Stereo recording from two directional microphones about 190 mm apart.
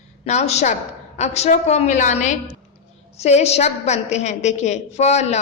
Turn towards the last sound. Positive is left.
turn(degrees=35)  # may be behind; listen again after turning